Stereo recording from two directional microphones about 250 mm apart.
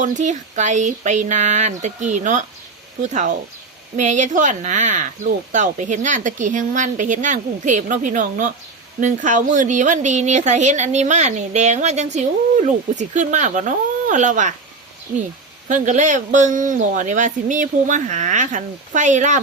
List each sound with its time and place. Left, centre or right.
0.0 s speech: right
15.7 s speech: right